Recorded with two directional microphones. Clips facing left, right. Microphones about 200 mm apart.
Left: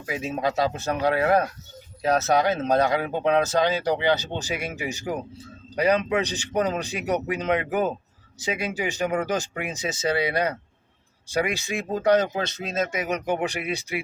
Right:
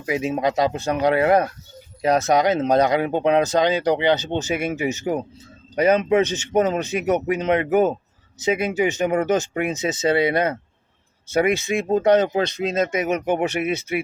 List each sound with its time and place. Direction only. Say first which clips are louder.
0.1 s speech: right 5 dB; 15° right (ahead or behind)
6.6 s speech: right 5 dB; 25° right (ahead or behind)